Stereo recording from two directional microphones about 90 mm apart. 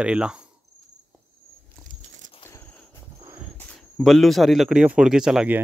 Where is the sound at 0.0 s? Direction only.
10° right (ahead or behind).